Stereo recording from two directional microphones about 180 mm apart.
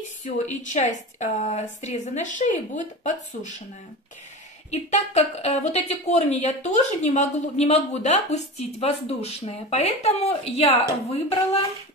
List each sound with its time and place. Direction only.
0.2 s speech: 40° left (ahead or behind)
4.6 s speech: 40° left (ahead or behind)